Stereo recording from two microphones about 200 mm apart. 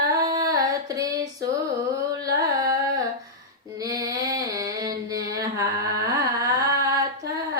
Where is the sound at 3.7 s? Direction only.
15° right (ahead or behind).